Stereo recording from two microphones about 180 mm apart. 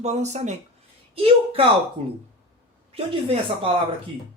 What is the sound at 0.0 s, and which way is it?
Speech, 40° right (ahead or behind).